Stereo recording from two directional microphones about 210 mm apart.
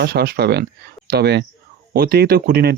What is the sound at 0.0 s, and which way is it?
Speech, 50° right (ahead or behind).